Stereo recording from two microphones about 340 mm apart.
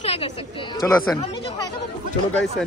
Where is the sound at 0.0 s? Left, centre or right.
Centre.